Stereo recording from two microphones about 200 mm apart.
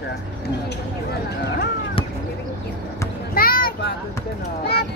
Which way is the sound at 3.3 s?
45° left (ahead or behind).